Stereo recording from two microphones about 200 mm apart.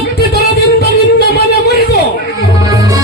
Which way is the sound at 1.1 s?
50° left (ahead or behind).